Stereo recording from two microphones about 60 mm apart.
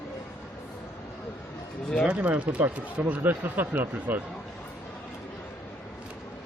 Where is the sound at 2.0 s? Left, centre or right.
Right.